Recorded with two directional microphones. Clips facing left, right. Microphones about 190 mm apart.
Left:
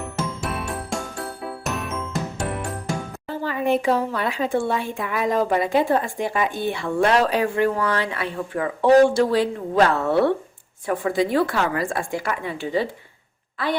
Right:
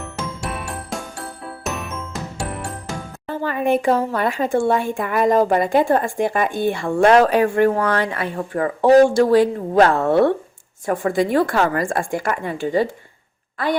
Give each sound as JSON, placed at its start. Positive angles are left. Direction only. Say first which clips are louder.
{"t": 0.2, "sound": "music", "louder": "even", "side_deg": 0}
{"t": 3.2, "sound": "speech", "louder": "right 3 dB", "side_deg": -55}